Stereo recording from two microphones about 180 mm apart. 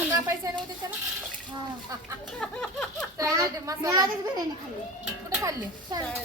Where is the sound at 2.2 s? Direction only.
5° left (ahead or behind).